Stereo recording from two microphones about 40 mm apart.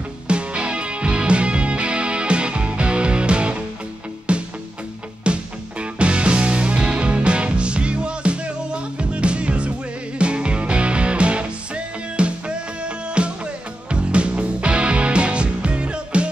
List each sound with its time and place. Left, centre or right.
0.3 s music: right